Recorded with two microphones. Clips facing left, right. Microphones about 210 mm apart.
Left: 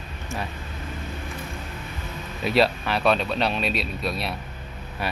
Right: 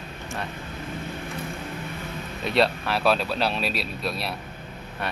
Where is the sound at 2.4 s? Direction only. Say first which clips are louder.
Left 2 dB; centre (ahead or behind).